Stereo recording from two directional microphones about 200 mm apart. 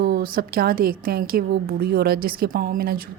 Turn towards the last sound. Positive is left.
turn(degrees=-50)  # may be behind; listen again after turning